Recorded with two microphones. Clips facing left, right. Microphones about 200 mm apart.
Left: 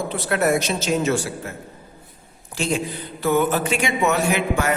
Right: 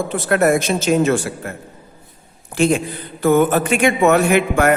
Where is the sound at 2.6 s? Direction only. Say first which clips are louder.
Right 7 dB; 55° right (ahead or behind).